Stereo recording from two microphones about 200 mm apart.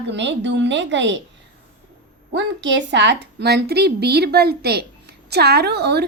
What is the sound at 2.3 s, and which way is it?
A woman's voice, 65° right (ahead or behind).